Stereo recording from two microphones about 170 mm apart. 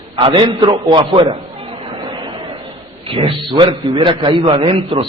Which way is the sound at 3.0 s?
30° right (ahead or behind).